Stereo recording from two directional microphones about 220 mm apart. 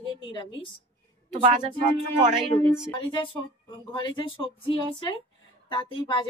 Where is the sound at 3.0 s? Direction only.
25° left (ahead or behind).